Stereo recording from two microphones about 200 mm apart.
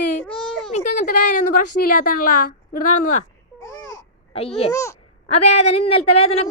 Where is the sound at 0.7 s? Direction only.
35° left (ahead or behind).